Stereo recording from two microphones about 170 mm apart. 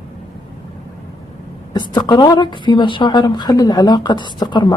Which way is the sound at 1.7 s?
25° left (ahead or behind).